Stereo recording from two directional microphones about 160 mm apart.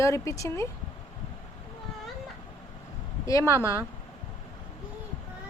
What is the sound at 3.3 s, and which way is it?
Speech, 20° left (ahead or behind).